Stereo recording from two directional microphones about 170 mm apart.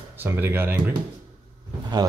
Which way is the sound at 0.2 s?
10° right (ahead or behind).